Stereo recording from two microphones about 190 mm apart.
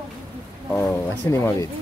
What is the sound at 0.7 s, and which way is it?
Speech, 10° left (ahead or behind).